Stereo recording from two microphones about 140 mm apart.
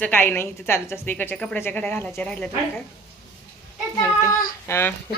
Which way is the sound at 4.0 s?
20° left (ahead or behind).